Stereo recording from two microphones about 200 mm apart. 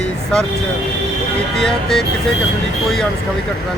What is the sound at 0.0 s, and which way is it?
Vehicle, 5° left (ahead or behind).